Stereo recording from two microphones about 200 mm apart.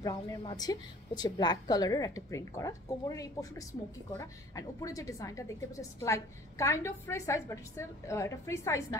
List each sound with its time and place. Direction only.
0.0 s a woman's voice: 15° left (ahead or behind)